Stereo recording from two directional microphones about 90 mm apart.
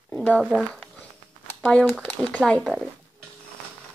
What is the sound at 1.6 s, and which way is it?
Speech, 15° left (ahead or behind).